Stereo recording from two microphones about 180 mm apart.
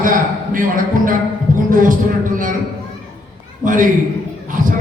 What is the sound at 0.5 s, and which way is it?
A man's voice, 50° right (ahead or behind).